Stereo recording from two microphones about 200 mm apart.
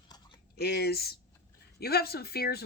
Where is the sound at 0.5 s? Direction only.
50° left (ahead or behind).